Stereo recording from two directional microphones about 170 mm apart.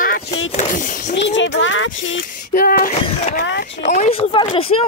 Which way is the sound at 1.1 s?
90° left.